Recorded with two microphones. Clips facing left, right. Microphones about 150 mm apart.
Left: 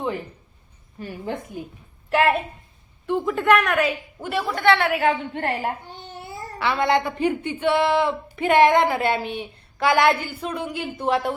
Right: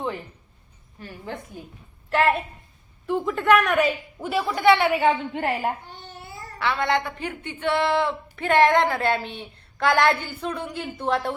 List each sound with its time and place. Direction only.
1.3 s a woman's voice: 15° left (ahead or behind)
2.0 s a woman's voice: 5° left (ahead or behind)
5.9 s babbling: 25° left (ahead or behind)
6.6 s a woman's voice: 10° left (ahead or behind)